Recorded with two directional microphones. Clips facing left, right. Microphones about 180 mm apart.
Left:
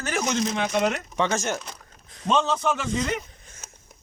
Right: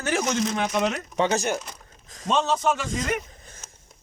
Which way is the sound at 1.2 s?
15° right (ahead or behind).